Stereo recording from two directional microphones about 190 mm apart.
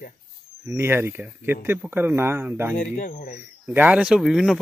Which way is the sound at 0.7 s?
10° right (ahead or behind).